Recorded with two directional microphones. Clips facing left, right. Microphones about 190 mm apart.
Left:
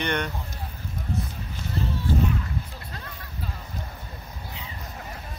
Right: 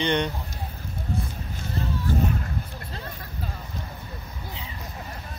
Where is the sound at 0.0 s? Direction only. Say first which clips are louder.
Right 3 dB; 20° right (ahead or behind).